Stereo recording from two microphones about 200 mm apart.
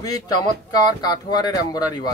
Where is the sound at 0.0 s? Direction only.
20° left (ahead or behind).